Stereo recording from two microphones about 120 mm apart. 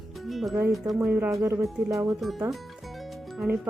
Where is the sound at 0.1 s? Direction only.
Centre (ahead or behind).